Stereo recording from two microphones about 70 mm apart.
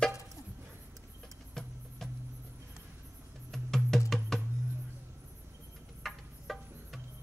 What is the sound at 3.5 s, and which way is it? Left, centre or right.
Music, centre.